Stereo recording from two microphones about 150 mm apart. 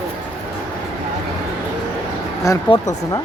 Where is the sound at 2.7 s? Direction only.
25° left (ahead or behind).